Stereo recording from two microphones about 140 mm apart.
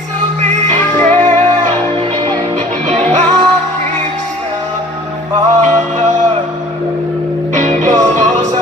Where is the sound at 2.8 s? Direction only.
60° right (ahead or behind).